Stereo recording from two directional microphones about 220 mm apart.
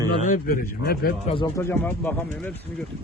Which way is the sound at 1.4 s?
10° left (ahead or behind).